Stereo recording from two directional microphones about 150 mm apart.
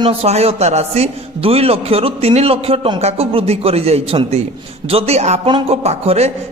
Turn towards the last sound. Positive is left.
turn(degrees=-45)  # may be behind; listen again after turning